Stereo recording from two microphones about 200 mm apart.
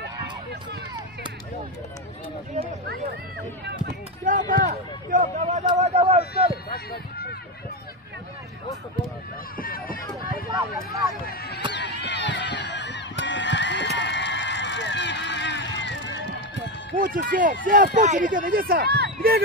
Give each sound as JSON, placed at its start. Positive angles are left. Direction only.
{"t": 2.5, "sound": "speech", "side_deg": -50}
{"t": 4.2, "sound": "speech", "side_deg": -40}
{"t": 6.7, "sound": "speech", "side_deg": 50}
{"t": 9.6, "sound": "run", "side_deg": 45}
{"t": 11.2, "sound": "a sound", "side_deg": 50}
{"t": 13.2, "sound": "horse", "side_deg": 65}
{"t": 16.9, "sound": "speech", "side_deg": -45}